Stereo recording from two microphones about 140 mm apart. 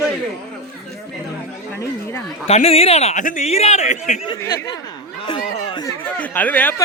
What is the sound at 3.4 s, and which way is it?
Speech, 50° left (ahead or behind).